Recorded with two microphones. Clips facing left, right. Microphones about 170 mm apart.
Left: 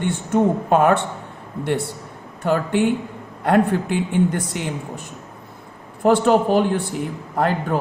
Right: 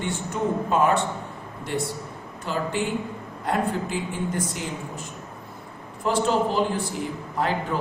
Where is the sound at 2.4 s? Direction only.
60° left (ahead or behind).